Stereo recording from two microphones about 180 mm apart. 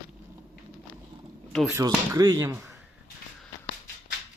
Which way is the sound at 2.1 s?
20° right (ahead or behind).